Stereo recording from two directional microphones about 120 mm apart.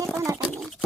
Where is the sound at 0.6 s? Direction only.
Centre (ahead or behind).